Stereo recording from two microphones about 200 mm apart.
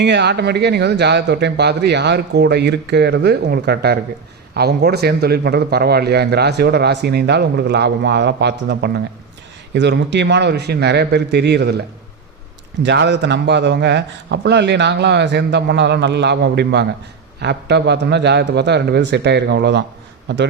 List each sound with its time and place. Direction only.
0.0 s a man's voice: 60° right (ahead or behind)
12.8 s a man's voice: 60° right (ahead or behind)